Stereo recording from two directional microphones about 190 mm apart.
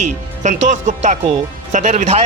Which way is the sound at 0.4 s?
40° right (ahead or behind).